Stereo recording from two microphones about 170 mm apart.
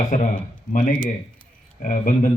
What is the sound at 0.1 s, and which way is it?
Speech, 50° left (ahead or behind).